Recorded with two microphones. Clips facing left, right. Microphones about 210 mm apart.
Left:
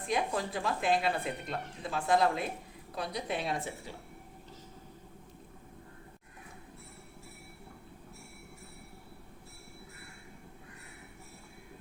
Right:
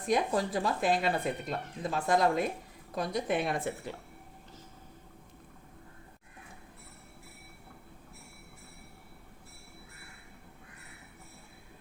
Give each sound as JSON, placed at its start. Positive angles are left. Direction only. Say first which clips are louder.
{"t": 0.0, "sound": "speech", "louder": "right 4 dB", "side_deg": -40}